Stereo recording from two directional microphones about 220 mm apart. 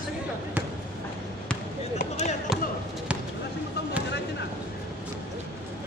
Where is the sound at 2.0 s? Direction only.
30° left (ahead or behind).